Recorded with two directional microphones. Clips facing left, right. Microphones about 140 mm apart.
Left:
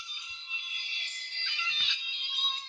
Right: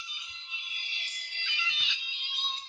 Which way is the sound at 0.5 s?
Centre (ahead or behind).